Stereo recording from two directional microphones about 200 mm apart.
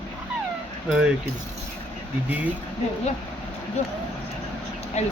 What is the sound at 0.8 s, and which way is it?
Speech, 5° right (ahead or behind).